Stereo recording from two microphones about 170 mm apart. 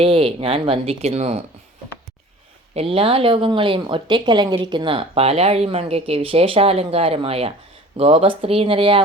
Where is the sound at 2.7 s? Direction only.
35° right (ahead or behind).